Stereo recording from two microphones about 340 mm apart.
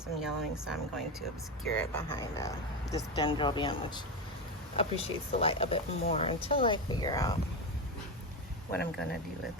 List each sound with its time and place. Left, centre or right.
0.2 s speech: centre